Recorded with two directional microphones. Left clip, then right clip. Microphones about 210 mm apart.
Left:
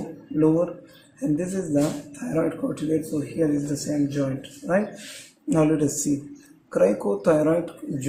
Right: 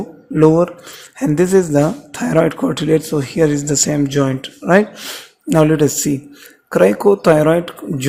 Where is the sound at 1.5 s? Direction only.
40° right (ahead or behind).